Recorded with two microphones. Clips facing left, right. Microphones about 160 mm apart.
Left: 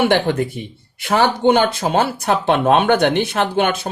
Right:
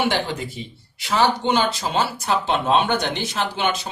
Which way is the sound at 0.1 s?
55° left (ahead or behind).